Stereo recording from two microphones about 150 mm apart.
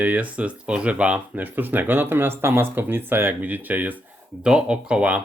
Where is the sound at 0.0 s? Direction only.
10° right (ahead or behind).